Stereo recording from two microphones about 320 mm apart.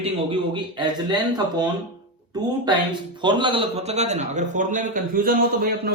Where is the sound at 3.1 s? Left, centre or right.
Centre.